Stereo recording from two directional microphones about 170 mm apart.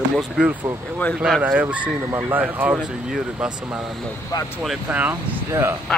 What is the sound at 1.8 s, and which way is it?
Speech, 20° right (ahead or behind).